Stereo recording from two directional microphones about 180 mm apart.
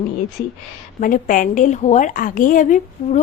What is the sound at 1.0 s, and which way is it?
A woman's voice, 50° left (ahead or behind).